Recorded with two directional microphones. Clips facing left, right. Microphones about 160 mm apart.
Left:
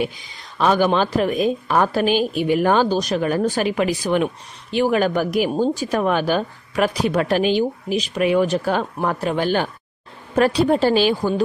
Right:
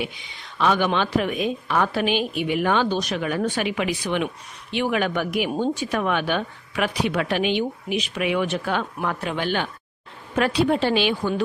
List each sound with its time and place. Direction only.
0.0 s speech: 40° left (ahead or behind)